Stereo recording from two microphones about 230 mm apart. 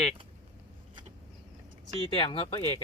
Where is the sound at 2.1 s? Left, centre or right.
Left.